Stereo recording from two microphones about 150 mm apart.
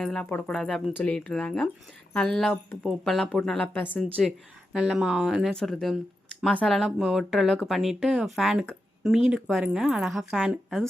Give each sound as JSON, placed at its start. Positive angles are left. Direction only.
{"t": 0.0, "sound": "a woman's voice", "side_deg": 5}
{"t": 4.7, "sound": "a woman's voice", "side_deg": -5}